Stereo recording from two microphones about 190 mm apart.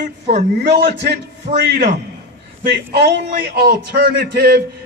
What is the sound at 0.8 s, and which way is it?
A man's voice, 60° right (ahead or behind).